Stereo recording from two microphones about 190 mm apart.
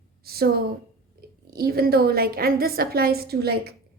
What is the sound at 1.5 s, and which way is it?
A woman's voice, 55° right (ahead or behind).